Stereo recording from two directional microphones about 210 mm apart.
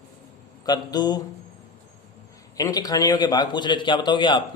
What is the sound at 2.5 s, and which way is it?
A man's voice, 15° left (ahead or behind).